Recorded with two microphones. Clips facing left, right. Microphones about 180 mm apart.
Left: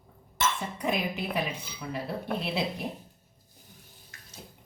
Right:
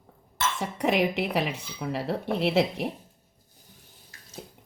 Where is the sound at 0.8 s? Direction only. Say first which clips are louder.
Right 7 dB; 80° right.